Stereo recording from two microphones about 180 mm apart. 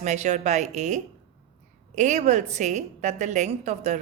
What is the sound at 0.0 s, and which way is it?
A woman's voice, 40° right (ahead or behind).